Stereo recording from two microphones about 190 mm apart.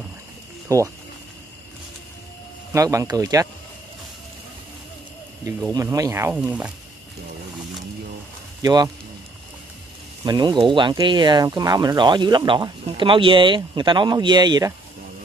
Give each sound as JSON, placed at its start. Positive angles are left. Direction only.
{"t": 0.7, "sound": "speech", "side_deg": -15}
{"t": 2.7, "sound": "speech", "side_deg": -15}
{"t": 5.7, "sound": "speech", "side_deg": -20}
{"t": 8.6, "sound": "speech", "side_deg": -20}
{"t": 10.2, "sound": "speech", "side_deg": -25}